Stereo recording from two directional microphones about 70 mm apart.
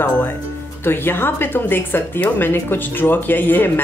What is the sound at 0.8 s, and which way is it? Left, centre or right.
A woman's voice, left.